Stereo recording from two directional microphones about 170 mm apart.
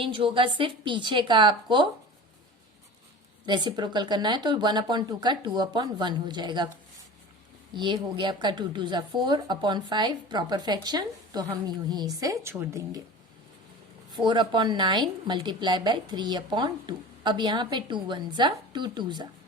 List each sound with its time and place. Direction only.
0.0 s speech: 30° right (ahead or behind)
3.4 s speech: 25° right (ahead or behind)
7.8 s speech: 25° right (ahead or behind)
14.1 s speech: 25° right (ahead or behind)